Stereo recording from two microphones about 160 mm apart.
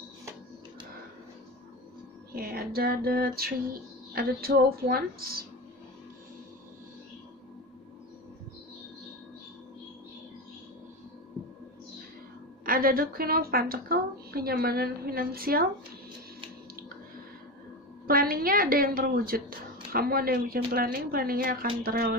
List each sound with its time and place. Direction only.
2.3 s a woman's voice: 70° right (ahead or behind)
12.6 s a woman's voice: 65° right (ahead or behind)
18.0 s a woman's voice: 70° right (ahead or behind)